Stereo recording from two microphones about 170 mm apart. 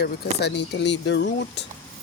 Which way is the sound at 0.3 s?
80° left.